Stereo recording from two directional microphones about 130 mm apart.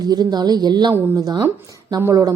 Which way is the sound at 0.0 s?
30° right (ahead or behind).